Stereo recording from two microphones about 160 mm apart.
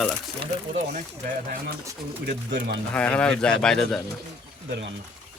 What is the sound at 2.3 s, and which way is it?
Speech, 90° right.